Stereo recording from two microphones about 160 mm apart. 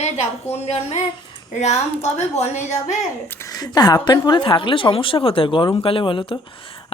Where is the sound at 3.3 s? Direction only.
15° left (ahead or behind).